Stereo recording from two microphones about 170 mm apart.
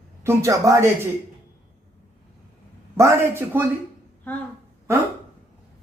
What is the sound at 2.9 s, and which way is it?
Speech, 15° right (ahead or behind).